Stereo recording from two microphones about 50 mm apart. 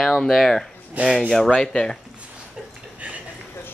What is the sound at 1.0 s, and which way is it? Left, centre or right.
Speech, right.